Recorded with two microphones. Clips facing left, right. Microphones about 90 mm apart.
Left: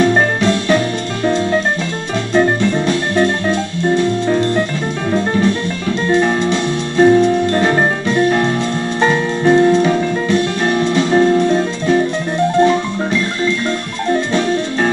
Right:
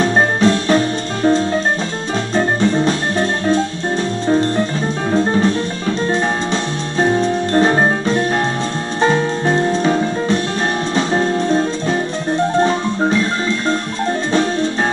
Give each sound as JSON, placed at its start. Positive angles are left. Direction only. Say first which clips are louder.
{"t": 0.0, "sound": "music", "louder": "left 1 dB", "side_deg": -35}